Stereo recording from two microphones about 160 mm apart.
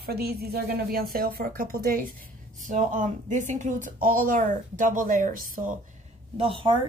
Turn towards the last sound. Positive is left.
turn(degrees=-30)  # may be behind; listen again after turning